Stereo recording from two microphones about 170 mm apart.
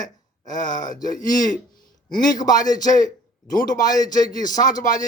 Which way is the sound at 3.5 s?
50° left (ahead or behind).